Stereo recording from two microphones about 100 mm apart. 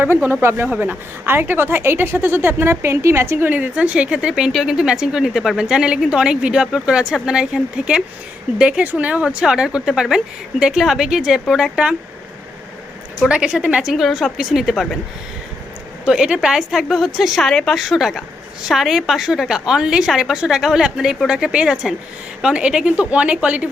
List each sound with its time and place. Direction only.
0.0 s a woman's voice: 20° right (ahead or behind)
13.2 s a woman's voice: 10° right (ahead or behind)
16.0 s a woman's voice: 10° right (ahead or behind)